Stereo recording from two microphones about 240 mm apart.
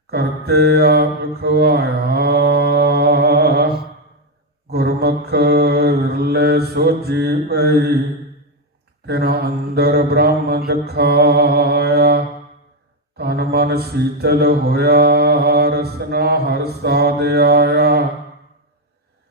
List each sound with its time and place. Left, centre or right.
0.1 s mantra: right
4.7 s mantra: right
9.0 s mantra: right